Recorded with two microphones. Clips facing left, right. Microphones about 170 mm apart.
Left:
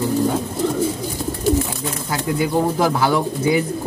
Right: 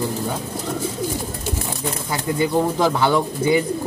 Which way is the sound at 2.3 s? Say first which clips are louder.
Even; 5° left (ahead or behind).